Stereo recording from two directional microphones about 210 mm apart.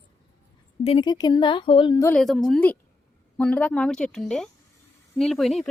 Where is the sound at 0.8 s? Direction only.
25° left (ahead or behind).